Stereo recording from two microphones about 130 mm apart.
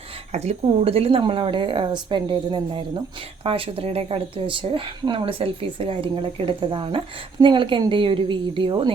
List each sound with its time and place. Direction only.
0.3 s speech: 55° right (ahead or behind); by 2.8 s 35° right (ahead or behind)
3.4 s a woman's voice: 45° right (ahead or behind)